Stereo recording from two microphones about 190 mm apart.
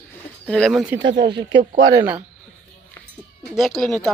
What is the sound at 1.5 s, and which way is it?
Speech, 65° right (ahead or behind).